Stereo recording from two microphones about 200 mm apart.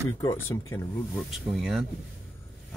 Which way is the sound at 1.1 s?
Centre (ahead or behind).